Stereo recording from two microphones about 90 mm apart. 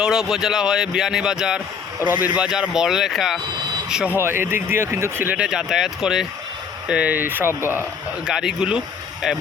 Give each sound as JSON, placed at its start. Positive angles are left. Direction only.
{"t": 0.0, "sound": "speech", "side_deg": -5}
{"t": 2.0, "sound": "speech", "side_deg": -20}
{"t": 4.1, "sound": "speech", "side_deg": -25}
{"t": 5.4, "sound": "speech", "side_deg": -5}
{"t": 8.2, "sound": "speech", "side_deg": -5}